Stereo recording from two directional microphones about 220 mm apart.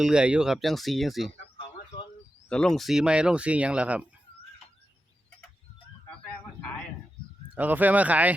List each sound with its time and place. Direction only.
0.0 s speech: 5° right (ahead or behind)
1.4 s a sound: 20° left (ahead or behind)
2.5 s speech: 5° left (ahead or behind)
7.5 s speech: 5° right (ahead or behind)